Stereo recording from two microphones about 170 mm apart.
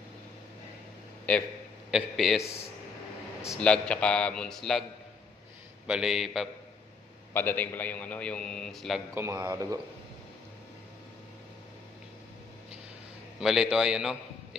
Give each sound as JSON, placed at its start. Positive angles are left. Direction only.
{"t": 1.3, "sound": "a man's voice", "side_deg": 5}
{"t": 3.4, "sound": "a man's voice", "side_deg": 5}
{"t": 5.9, "sound": "a man's voice", "side_deg": -5}
{"t": 7.3, "sound": "a man's voice", "side_deg": 10}
{"t": 9.1, "sound": "a man's voice", "side_deg": -15}
{"t": 13.4, "sound": "a man's voice", "side_deg": -5}